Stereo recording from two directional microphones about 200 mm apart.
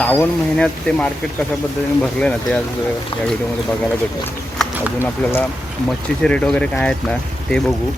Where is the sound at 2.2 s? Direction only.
5° left (ahead or behind).